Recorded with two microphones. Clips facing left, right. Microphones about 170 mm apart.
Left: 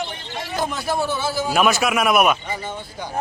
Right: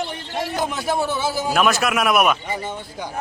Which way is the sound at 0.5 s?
15° right (ahead or behind).